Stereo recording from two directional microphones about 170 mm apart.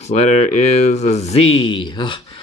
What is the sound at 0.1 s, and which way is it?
Speech, 45° left (ahead or behind).